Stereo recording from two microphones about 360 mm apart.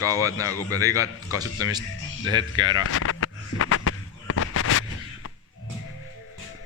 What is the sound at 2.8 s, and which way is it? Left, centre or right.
Fireworks, left.